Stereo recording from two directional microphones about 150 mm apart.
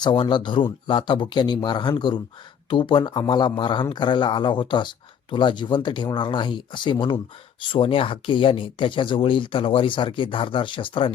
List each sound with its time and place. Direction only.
0.0 s speech: 30° left (ahead or behind)